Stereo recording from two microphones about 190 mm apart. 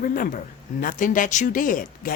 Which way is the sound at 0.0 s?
45° left (ahead or behind).